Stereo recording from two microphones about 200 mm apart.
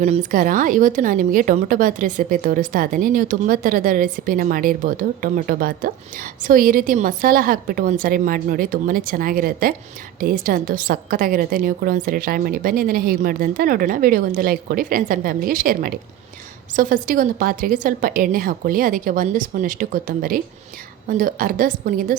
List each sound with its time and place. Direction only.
0.0 s a woman's voice: 35° right (ahead or behind)